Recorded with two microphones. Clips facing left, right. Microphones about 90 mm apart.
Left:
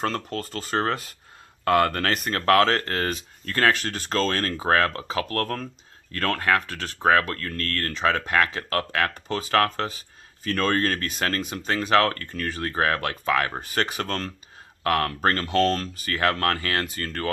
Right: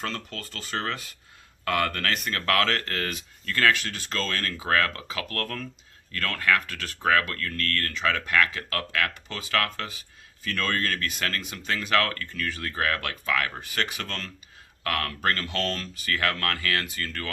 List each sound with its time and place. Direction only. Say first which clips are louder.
0.0 s speech: left 7 dB; 40° left (ahead or behind)